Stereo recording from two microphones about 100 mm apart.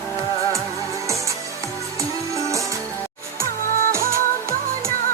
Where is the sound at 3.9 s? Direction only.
25° right (ahead or behind).